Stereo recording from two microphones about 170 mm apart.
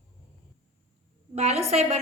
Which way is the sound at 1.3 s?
40° right (ahead or behind).